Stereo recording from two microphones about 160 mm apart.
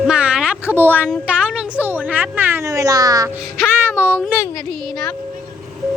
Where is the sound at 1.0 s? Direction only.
5° right (ahead or behind).